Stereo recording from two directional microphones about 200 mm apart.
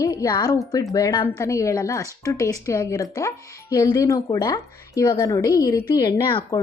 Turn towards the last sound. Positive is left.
turn(degrees=25)  # may be behind; listen again after turning